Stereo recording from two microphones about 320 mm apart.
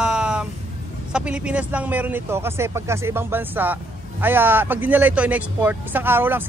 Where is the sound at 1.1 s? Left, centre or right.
Centre.